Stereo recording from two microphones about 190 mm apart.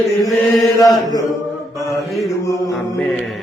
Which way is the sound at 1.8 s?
15° left (ahead or behind).